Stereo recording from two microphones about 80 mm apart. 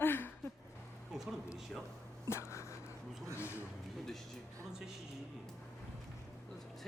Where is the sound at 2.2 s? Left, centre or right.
Left.